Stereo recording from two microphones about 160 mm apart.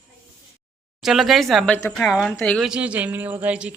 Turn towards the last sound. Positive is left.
turn(degrees=-10)  # may be behind; listen again after turning